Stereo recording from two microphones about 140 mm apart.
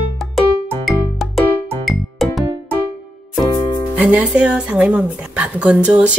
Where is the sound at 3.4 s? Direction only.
30° left (ahead or behind).